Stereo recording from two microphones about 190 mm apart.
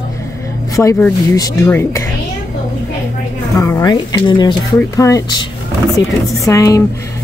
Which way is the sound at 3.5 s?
15° left (ahead or behind).